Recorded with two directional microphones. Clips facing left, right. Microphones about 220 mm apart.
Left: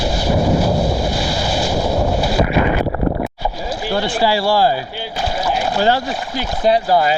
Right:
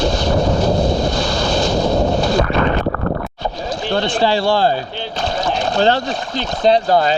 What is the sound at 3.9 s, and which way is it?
Speech, 10° left (ahead or behind).